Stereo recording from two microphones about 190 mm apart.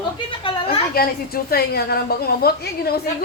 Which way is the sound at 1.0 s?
55° left (ahead or behind).